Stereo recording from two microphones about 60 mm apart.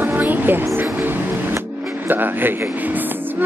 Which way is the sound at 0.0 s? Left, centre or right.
Right.